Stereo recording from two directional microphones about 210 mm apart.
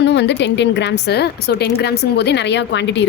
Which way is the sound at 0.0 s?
55° left (ahead or behind).